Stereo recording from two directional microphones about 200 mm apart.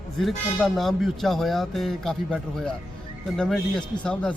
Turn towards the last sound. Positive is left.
turn(degrees=5)  # may be behind; listen again after turning